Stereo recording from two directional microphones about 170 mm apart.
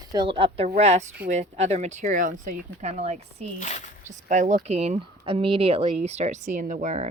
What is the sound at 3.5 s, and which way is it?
Speech, 45° left (ahead or behind).